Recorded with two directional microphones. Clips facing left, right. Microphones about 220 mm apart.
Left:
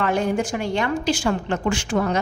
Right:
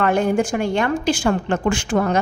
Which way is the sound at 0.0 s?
50° right (ahead or behind).